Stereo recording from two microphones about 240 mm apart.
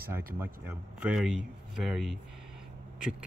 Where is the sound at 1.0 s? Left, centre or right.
Centre.